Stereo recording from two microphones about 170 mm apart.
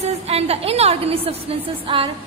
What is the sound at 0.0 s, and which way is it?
A woman's voice, 35° right (ahead or behind).